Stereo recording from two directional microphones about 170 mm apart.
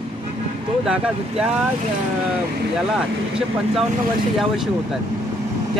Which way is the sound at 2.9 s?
5° right (ahead or behind).